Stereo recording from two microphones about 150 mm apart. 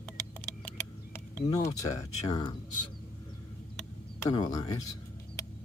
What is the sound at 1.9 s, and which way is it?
Speech, 25° left (ahead or behind).